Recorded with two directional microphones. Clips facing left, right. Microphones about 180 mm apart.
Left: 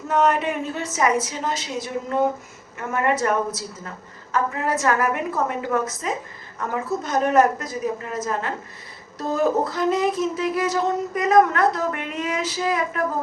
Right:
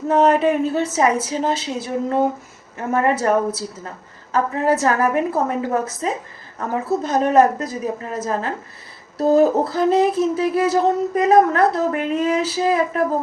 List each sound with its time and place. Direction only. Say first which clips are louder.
0.1 s speech: right 5 dB; 30° right (ahead or behind)